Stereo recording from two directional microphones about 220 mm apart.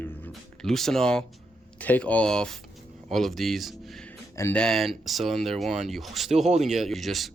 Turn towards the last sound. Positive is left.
turn(degrees=0)  # may be behind; listen again after turning